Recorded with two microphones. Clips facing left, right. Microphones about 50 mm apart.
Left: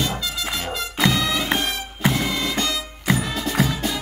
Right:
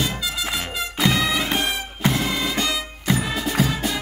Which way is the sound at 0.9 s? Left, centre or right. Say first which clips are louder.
Even; centre.